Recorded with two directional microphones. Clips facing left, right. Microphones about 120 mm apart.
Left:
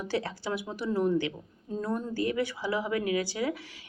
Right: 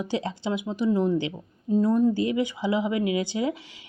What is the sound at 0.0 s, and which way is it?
Speech, 20° right (ahead or behind).